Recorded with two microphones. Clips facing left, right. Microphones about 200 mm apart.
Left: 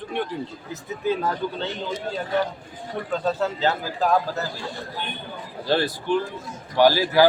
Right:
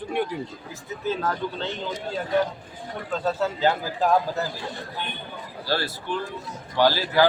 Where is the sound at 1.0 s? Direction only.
15° left (ahead or behind).